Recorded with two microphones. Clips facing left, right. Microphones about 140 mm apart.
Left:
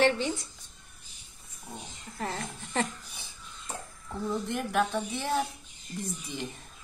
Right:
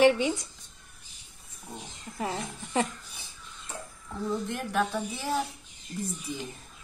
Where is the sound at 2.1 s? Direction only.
10° right (ahead or behind).